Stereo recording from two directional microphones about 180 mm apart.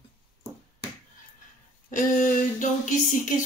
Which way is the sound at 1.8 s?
45° left (ahead or behind).